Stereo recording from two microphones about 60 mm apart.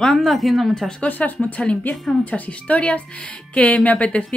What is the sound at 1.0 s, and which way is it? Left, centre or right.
Speech, left.